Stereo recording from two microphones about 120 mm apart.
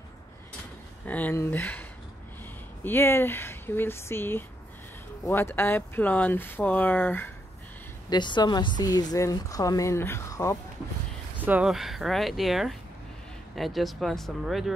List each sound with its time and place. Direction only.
1.0 s speech: 15° left (ahead or behind)
8.1 s a woman's voice: 40° left (ahead or behind)
11.3 s speech: 15° right (ahead or behind)
11.7 s speech: centre (ahead or behind)